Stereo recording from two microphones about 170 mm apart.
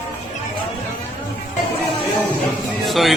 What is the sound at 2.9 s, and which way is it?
Speech, centre (ahead or behind).